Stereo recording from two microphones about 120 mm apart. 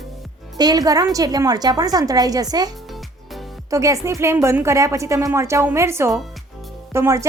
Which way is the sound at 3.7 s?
25° right (ahead or behind).